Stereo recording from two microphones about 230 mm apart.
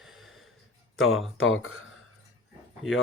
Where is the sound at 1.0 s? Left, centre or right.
Left.